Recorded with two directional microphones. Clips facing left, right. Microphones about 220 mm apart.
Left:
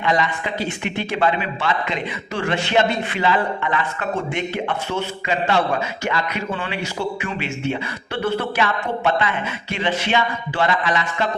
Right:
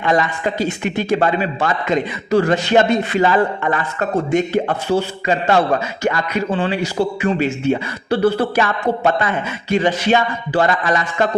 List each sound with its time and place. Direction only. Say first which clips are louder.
0.0 s a man's voice: right 4 dB; 50° right (ahead or behind)